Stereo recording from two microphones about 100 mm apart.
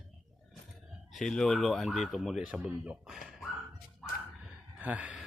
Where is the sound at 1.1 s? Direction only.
5° left (ahead or behind).